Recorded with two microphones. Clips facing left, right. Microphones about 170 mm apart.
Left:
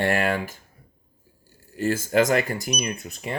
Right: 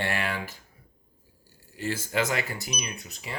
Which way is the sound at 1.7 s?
45° left (ahead or behind).